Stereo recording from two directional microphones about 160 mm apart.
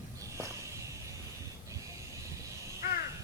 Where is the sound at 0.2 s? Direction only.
20° right (ahead or behind).